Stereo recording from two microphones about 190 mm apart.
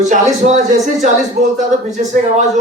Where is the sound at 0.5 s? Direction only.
40° right (ahead or behind).